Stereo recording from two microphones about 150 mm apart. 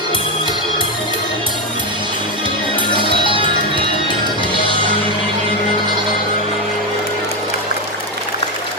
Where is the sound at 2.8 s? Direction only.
35° right (ahead or behind).